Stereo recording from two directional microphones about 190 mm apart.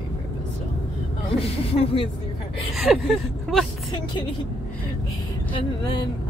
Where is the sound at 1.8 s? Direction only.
30° left (ahead or behind).